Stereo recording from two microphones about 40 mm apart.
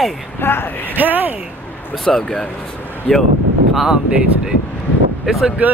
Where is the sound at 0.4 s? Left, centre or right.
Left.